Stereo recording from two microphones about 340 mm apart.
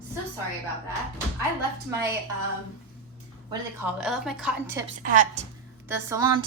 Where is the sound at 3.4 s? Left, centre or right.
Centre.